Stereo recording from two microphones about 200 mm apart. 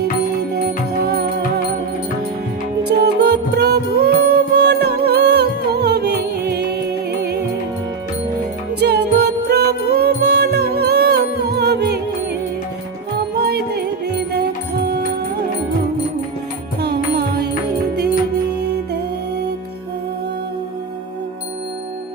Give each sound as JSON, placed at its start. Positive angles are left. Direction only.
{"t": 1.0, "sound": "music", "side_deg": -50}
{"t": 3.0, "sound": "music", "side_deg": -55}
{"t": 8.8, "sound": "music", "side_deg": -55}
{"t": 13.3, "sound": "music", "side_deg": -55}
{"t": 16.8, "sound": "music", "side_deg": -55}